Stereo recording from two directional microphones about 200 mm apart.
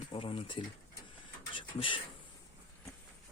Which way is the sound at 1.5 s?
25° left (ahead or behind).